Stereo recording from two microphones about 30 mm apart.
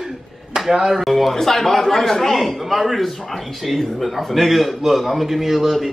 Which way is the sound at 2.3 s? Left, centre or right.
Centre.